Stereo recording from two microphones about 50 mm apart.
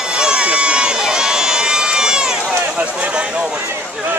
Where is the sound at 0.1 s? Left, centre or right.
Centre.